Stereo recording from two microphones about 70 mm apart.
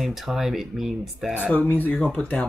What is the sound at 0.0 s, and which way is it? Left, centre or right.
Speech, centre.